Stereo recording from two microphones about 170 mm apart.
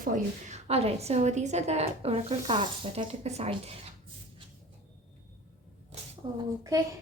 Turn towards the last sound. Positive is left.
turn(degrees=-20)  # may be behind; listen again after turning